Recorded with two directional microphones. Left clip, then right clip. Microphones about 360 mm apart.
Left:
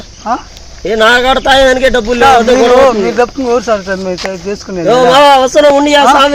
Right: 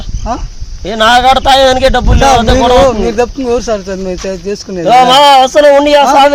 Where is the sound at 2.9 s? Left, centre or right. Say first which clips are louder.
Left 1 dB; centre.